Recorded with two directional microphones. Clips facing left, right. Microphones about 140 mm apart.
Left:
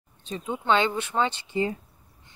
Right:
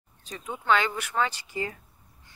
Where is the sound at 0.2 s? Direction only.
25° left (ahead or behind).